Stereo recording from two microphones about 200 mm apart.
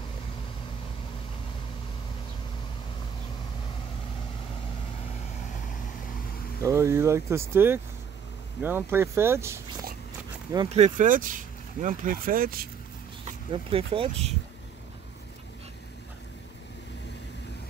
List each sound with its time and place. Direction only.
6.6 s speech: 15° right (ahead or behind)
10.7 s speech: 35° right (ahead or behind)
13.5 s speech: 25° right (ahead or behind)